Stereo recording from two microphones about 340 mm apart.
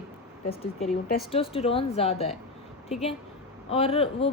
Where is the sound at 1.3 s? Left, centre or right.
Centre.